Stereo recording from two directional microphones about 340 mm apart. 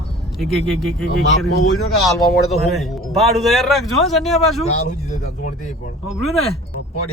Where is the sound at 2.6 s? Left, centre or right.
Centre.